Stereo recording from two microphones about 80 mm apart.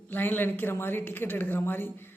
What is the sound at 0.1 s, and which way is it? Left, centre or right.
Speech, left.